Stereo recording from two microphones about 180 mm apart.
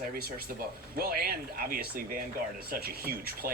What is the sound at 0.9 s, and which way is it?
Speech, 55° right (ahead or behind).